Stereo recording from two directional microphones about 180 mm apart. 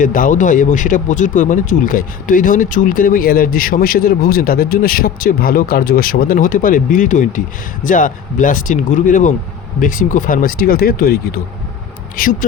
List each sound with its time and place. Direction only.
0.0 s speech: 50° left (ahead or behind)